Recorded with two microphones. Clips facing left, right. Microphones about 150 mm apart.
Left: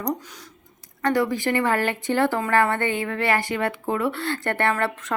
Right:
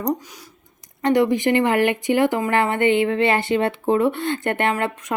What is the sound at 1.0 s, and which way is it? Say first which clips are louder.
Speech: right 5 dB; 20° right (ahead or behind).